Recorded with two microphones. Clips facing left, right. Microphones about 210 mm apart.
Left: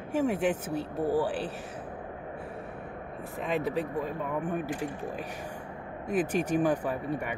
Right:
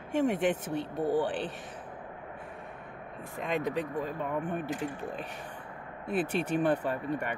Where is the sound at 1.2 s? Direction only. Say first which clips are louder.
Left 1 dB; 5° left (ahead or behind).